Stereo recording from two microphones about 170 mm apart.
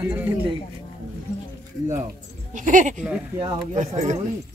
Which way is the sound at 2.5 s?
50° right (ahead or behind).